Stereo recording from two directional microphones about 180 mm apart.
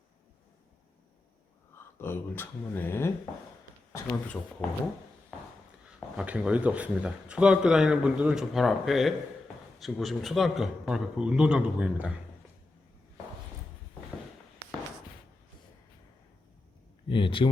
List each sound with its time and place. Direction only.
2.0 s speech: 10° left (ahead or behind)
6.1 s speech: 5° right (ahead or behind)
17.1 s speech: 30° left (ahead or behind)